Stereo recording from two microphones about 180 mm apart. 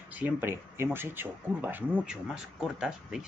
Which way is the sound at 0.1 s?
10° right (ahead or behind).